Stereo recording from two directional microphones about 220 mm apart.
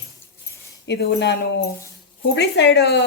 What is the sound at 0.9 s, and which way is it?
Speech, 50° left (ahead or behind).